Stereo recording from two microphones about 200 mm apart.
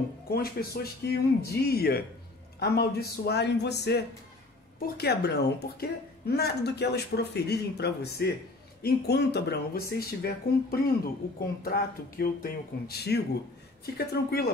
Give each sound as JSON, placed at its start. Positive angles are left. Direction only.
{"t": 0.3, "sound": "a woman's voice", "side_deg": 50}